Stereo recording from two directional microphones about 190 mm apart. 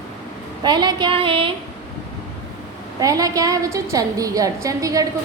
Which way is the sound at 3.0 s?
20° right (ahead or behind).